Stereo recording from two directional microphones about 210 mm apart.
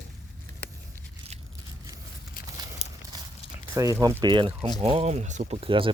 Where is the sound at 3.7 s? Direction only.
15° right (ahead or behind).